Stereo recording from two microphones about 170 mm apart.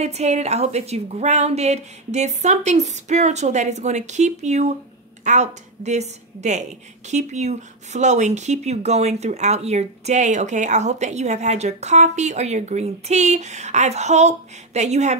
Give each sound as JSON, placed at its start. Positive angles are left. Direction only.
{"t": 0.0, "sound": "a woman's voice", "side_deg": -40}